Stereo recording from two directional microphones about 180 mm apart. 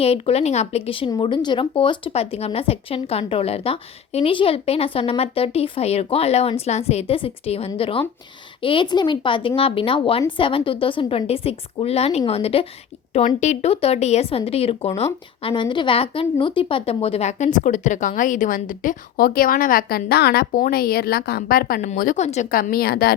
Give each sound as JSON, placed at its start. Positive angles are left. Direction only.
{"t": 0.0, "sound": "speech", "side_deg": 35}